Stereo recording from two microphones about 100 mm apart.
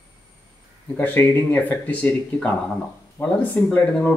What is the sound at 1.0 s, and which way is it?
Speech, 15° left (ahead or behind).